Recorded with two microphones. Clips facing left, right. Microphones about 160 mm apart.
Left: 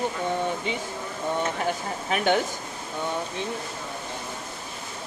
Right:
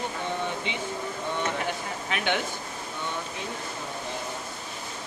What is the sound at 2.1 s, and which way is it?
Speech, 40° left (ahead or behind).